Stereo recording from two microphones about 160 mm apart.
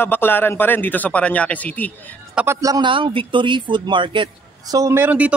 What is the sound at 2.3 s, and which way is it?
A man's voice, 15° right (ahead or behind).